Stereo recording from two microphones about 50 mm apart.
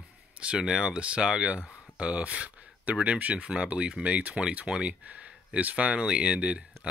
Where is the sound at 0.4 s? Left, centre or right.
Centre.